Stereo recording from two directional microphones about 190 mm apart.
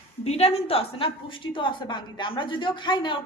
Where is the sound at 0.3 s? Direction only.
35° left (ahead or behind).